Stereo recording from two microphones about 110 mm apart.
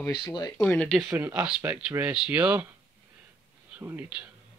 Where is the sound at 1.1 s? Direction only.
15° right (ahead or behind).